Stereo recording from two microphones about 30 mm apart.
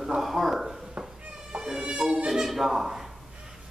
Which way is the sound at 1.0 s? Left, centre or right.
Right.